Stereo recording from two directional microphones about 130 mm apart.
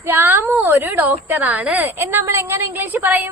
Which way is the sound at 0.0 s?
15° right (ahead or behind).